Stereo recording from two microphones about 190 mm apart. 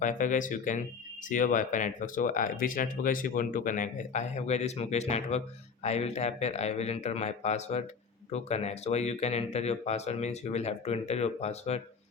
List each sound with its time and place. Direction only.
0.0 s speech: 40° left (ahead or behind)